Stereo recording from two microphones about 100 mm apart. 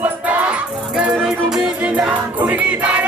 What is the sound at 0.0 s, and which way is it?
Music, 15° right (ahead or behind).